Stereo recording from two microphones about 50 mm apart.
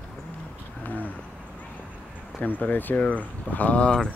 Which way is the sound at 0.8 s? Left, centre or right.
Left.